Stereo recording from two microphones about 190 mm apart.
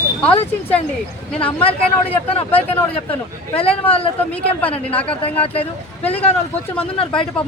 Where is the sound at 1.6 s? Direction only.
30° left (ahead or behind).